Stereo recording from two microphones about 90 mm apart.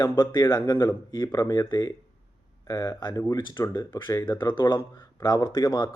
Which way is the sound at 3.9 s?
30° left (ahead or behind).